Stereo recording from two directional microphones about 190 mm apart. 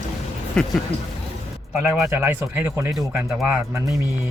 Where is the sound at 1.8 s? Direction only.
10° right (ahead or behind).